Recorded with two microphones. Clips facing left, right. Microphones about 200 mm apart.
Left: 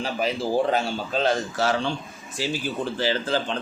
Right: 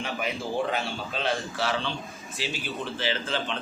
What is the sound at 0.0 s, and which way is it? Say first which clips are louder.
A man's voice: left 5 dB; 35° left (ahead or behind).